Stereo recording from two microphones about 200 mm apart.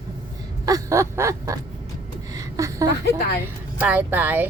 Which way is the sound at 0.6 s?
15° right (ahead or behind).